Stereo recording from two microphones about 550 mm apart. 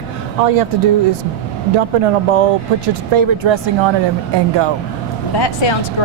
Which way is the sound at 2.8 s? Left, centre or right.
Right.